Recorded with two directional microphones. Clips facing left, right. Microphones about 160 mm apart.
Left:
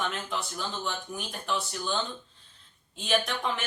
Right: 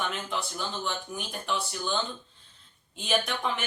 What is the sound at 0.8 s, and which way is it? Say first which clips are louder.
Speech: right 1 dB; centre (ahead or behind).